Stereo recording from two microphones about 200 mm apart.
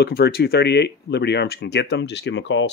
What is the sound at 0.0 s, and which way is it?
Speech, 55° left (ahead or behind).